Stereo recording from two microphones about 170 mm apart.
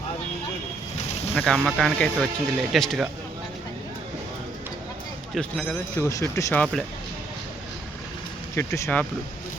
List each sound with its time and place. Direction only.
1.4 s speech: centre (ahead or behind)
5.3 s speech: 5° left (ahead or behind)
6.0 s speech: 20° left (ahead or behind)
8.5 s speech: 15° left (ahead or behind)